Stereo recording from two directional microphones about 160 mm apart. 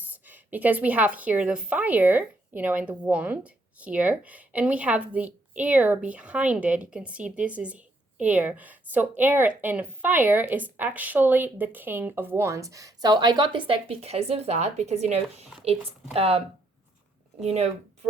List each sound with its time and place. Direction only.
0.0 s a woman's voice: 10° right (ahead or behind); by 16.4 s 40° right (ahead or behind)
17.4 s a woman's voice: 45° right (ahead or behind)